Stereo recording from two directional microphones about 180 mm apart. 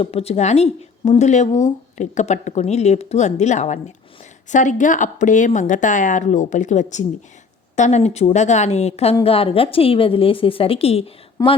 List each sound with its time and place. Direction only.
0.0 s speech: 35° left (ahead or behind)
11.4 s speech: 20° left (ahead or behind)